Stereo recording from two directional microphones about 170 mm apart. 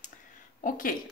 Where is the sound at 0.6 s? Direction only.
55° left (ahead or behind).